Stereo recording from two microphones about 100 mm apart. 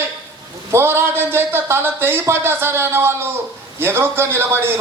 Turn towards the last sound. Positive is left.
turn(degrees=-25)  # may be behind; listen again after turning